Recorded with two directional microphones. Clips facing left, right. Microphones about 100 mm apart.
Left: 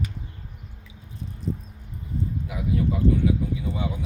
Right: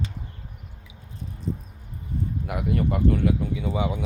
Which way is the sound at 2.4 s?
65° right (ahead or behind).